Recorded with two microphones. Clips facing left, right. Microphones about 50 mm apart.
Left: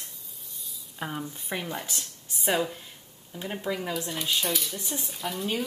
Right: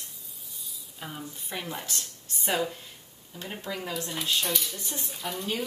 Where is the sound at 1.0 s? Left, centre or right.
Left.